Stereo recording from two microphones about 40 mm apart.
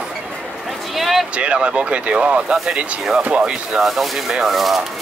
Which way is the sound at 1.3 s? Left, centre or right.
Right.